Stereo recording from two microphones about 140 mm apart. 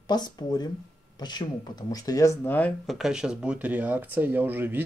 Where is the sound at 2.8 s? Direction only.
5° right (ahead or behind).